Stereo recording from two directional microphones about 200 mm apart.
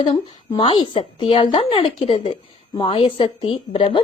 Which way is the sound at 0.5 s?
25° left (ahead or behind).